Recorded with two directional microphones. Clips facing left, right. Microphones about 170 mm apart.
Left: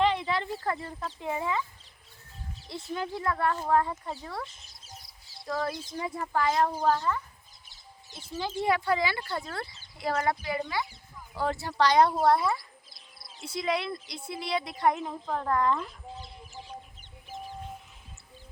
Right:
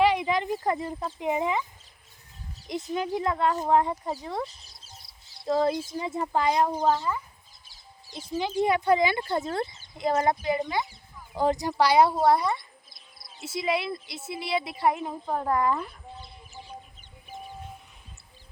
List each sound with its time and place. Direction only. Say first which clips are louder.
0.0 s speech: right 4 dB; 15° right (ahead or behind)
2.6 s speech: right 5 dB; 20° right (ahead or behind)
4.4 s chicken: right 4 dB; 35° right (ahead or behind)
5.5 s speech: right 8 dB; 25° right (ahead or behind); by 15.9 s 10° right (ahead or behind)